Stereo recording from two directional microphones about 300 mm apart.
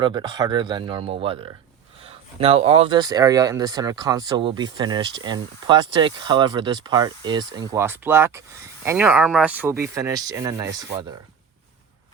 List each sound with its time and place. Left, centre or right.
0.0 s speech: centre